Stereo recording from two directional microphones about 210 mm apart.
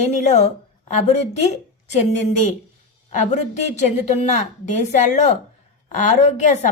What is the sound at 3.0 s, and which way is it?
A woman's voice, 35° left (ahead or behind).